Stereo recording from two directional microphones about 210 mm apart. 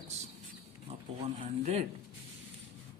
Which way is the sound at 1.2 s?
30° right (ahead or behind).